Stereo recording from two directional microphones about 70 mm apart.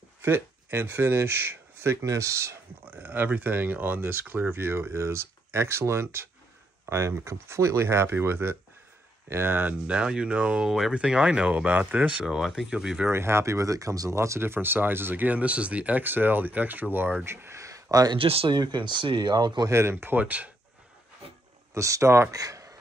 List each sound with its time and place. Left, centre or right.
0.2 s speech: right
2.8 s speech: right
9.8 s speech: centre
10.7 s speech: centre
12.4 s speech: centre
13.1 s speech: right
17.9 s speech: right
19.7 s speech: right
21.7 s speech: right
22.3 s a sound: right